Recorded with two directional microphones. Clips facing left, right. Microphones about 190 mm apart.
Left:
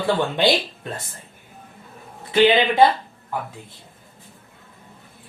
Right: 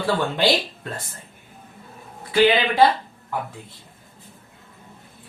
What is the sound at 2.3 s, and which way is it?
Speech, 20° left (ahead or behind).